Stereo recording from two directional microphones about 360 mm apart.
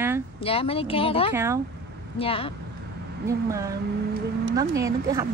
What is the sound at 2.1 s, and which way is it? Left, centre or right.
Speech, centre.